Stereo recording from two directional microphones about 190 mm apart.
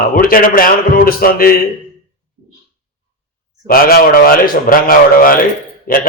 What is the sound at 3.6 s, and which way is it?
A man's voice, 50° left (ahead or behind).